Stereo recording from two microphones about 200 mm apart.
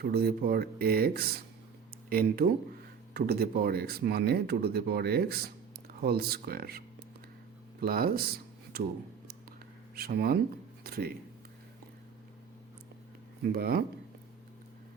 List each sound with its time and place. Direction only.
0.0 s speech: 50° right (ahead or behind)
9.9 s speech: 50° right (ahead or behind)
13.4 s speech: 50° right (ahead or behind)